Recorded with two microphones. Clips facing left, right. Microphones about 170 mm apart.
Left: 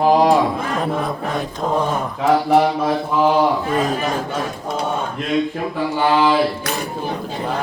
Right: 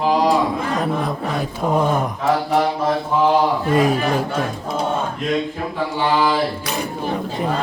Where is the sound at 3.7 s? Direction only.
10° right (ahead or behind).